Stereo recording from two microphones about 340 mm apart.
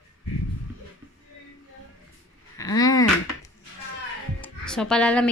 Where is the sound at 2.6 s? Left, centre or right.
Centre.